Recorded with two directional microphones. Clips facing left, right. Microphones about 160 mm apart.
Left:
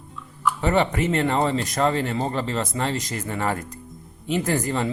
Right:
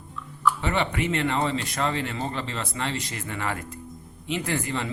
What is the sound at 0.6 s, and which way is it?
Speech, 40° left (ahead or behind).